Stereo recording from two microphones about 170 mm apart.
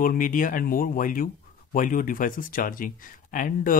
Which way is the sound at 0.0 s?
55° left (ahead or behind).